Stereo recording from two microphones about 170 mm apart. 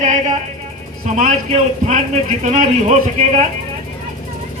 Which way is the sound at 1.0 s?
45° right (ahead or behind).